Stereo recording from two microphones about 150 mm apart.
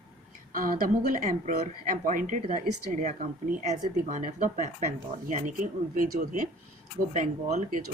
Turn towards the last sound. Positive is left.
turn(degrees=-55)  # may be behind; listen again after turning